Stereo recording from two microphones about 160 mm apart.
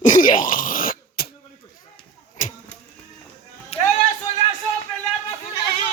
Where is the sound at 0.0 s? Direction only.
55° left (ahead or behind).